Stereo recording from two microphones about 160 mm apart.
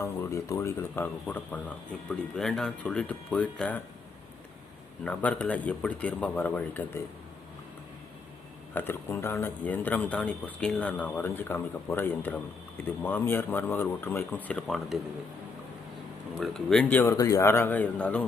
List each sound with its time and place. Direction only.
0.0 s speech: 20° left (ahead or behind)
5.0 s speech: 10° left (ahead or behind)
8.7 s speech: 15° left (ahead or behind)
16.3 s speech: centre (ahead or behind)
17.0 s speech: 20° left (ahead or behind)